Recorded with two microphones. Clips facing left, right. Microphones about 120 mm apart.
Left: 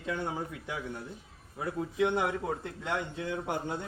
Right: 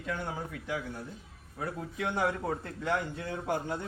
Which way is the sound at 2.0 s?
20° left (ahead or behind).